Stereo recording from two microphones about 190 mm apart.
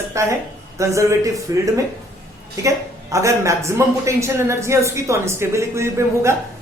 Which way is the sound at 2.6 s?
15° right (ahead or behind).